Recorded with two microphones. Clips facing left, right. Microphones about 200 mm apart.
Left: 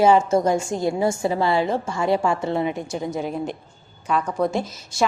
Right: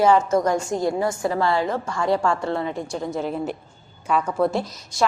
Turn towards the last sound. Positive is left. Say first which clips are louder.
# left 1 dB
turn(degrees=0)  # may be behind; listen again after turning